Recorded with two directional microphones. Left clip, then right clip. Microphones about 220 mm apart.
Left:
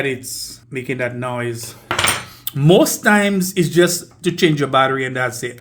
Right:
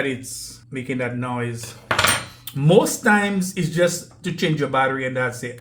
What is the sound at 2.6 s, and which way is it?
Speech, 45° left (ahead or behind).